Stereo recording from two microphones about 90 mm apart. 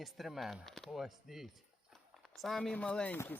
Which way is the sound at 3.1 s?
25° left (ahead or behind).